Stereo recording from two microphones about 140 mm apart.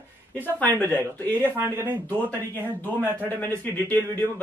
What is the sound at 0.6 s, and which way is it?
Speech, 10° left (ahead or behind).